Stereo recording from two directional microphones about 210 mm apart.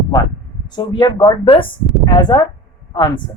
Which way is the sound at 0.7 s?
20° left (ahead or behind).